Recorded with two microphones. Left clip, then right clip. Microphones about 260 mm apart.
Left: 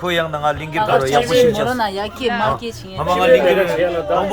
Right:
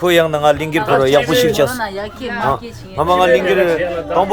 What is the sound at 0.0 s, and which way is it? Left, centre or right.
Speech, right.